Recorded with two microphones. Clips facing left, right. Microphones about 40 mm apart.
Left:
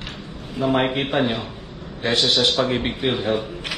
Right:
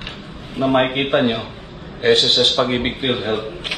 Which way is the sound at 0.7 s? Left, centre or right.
Right.